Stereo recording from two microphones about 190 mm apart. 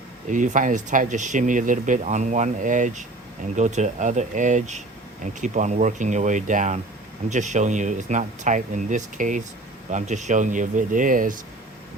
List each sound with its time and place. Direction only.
0.3 s speech: 40° right (ahead or behind)